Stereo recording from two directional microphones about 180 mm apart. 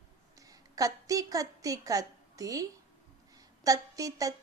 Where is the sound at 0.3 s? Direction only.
20° right (ahead or behind).